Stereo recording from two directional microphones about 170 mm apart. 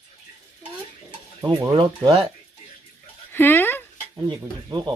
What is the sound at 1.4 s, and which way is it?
Speech, 25° right (ahead or behind).